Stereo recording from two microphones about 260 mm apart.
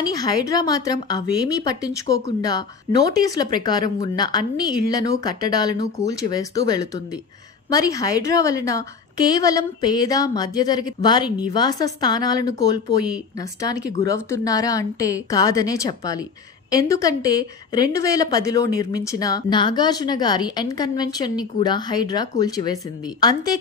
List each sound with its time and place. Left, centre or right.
0.1 s a woman's voice: centre